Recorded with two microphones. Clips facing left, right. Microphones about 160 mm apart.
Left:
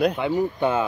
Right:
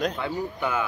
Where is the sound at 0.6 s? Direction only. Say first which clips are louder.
Left 3 dB; 30° left (ahead or behind).